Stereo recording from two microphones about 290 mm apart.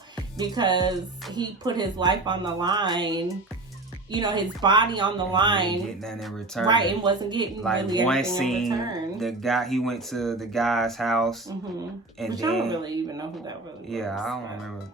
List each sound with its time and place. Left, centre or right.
0.3 s speech: centre
6.1 s speech: centre
6.7 s speech: centre
7.6 s speech: centre
8.7 s speech: centre
9.1 s speech: centre
12.7 s speech: centre
13.9 s speech: centre